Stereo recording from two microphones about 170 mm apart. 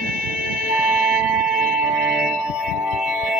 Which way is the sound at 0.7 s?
10° right (ahead or behind).